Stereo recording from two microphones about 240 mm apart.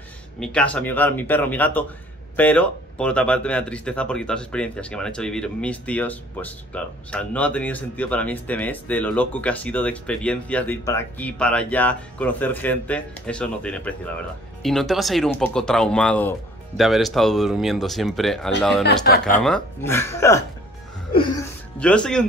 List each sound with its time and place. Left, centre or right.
0.4 s speech: centre
18.9 s speech: left
19.4 s speech: centre
21.7 s speech: centre